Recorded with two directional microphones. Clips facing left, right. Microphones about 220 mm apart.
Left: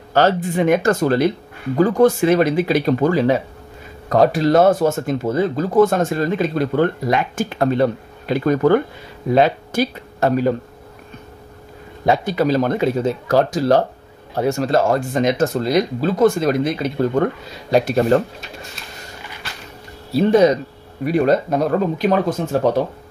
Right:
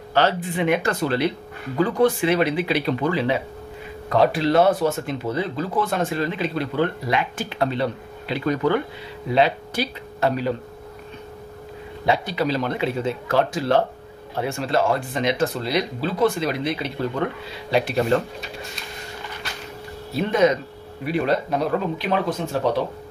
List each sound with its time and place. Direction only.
0.1 s speech: 45° left (ahead or behind)
12.1 s speech: 45° left (ahead or behind)
20.1 s speech: 35° left (ahead or behind)